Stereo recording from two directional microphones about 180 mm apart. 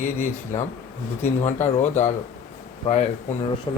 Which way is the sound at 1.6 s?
40° left (ahead or behind).